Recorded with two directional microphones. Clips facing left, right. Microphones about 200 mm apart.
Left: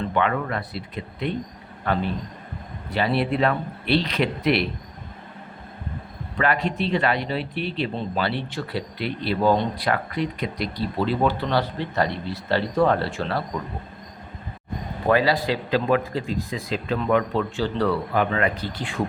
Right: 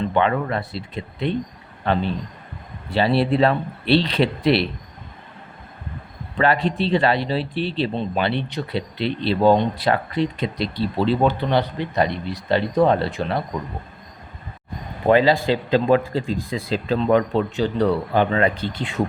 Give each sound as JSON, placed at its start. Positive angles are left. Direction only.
{"t": 0.1, "sound": "speech", "side_deg": -30}
{"t": 6.3, "sound": "speech", "side_deg": -30}
{"t": 15.0, "sound": "a man's voice", "side_deg": -25}